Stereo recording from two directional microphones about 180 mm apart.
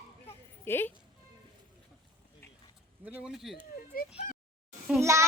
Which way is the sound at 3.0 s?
5° right (ahead or behind).